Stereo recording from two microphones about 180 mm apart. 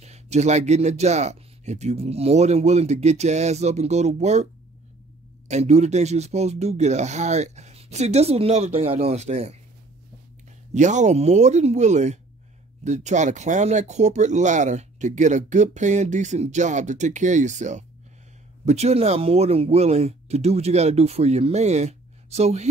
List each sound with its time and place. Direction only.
0.0 s speech: 40° right (ahead or behind)
5.5 s speech: 40° right (ahead or behind)
10.7 s speech: 40° right (ahead or behind)